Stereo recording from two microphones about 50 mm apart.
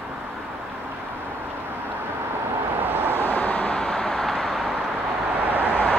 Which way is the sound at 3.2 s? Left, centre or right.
Left.